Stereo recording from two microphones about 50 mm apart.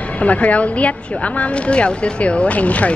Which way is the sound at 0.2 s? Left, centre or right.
Left.